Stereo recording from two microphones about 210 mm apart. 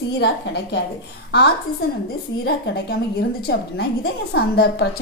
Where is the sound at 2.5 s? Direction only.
50° left (ahead or behind).